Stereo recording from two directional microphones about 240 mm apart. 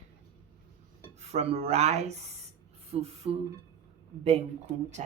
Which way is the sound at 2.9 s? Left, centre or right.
Right.